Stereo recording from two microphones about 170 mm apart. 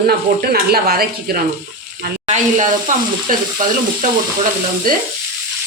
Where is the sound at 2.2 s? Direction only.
50° right (ahead or behind).